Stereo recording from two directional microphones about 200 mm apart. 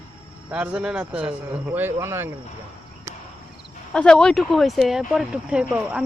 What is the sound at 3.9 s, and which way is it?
Speech, 5° left (ahead or behind).